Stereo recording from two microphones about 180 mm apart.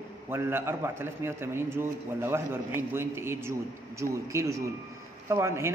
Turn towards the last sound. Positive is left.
turn(degrees=-15)  # may be behind; listen again after turning